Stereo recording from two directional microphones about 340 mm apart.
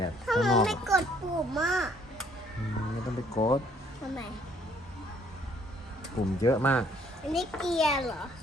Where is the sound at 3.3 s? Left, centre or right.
Centre.